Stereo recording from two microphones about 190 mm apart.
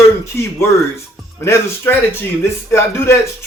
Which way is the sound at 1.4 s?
15° left (ahead or behind).